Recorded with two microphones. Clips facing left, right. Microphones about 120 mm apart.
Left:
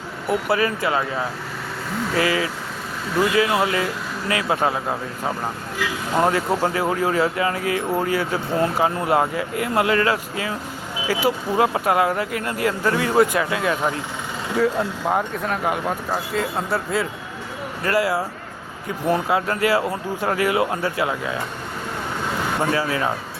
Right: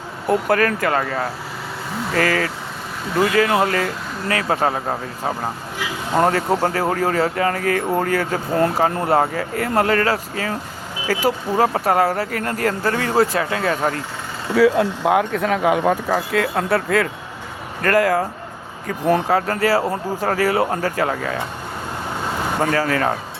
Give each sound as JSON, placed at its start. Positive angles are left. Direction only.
{"t": 0.3, "sound": "speech", "side_deg": -50}
{"t": 14.5, "sound": "speech", "side_deg": -85}
{"t": 17.8, "sound": "speech", "side_deg": -50}
{"t": 22.6, "sound": "speech", "side_deg": -50}